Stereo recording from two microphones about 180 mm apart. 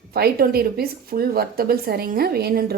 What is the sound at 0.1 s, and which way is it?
A woman's voice, 55° right (ahead or behind).